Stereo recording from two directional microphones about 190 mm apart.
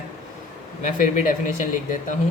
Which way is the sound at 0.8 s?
40° left (ahead or behind).